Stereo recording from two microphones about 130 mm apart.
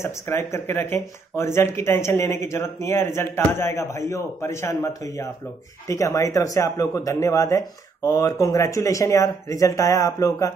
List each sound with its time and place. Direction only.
0.0 s speech: 20° left (ahead or behind)